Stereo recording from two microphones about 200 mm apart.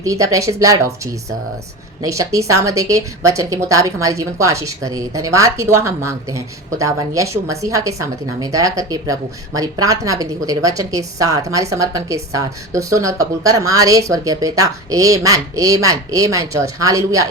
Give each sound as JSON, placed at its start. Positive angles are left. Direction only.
{"t": 0.0, "sound": "a woman's voice", "side_deg": -15}
{"t": 2.0, "sound": "a woman's voice", "side_deg": -15}